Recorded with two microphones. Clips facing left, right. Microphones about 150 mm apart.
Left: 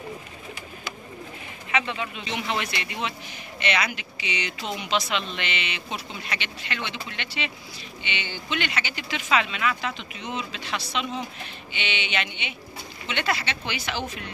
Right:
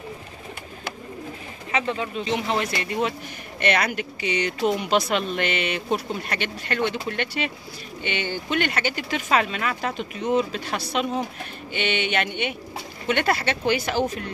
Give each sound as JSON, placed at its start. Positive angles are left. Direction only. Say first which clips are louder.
{"t": 1.7, "sound": "speech", "louder": "right 2 dB", "side_deg": -35}